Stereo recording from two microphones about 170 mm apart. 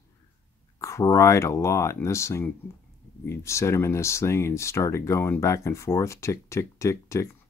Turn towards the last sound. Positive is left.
turn(degrees=15)  # may be behind; listen again after turning